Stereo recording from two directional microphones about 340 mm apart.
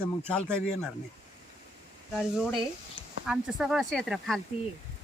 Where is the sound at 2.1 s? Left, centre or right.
Centre.